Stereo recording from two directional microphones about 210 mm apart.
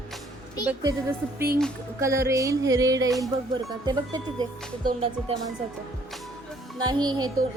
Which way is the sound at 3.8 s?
20° right (ahead or behind).